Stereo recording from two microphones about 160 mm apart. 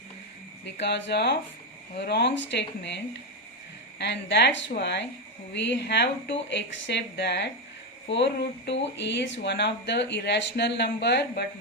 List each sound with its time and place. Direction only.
0.6 s speech: 90° left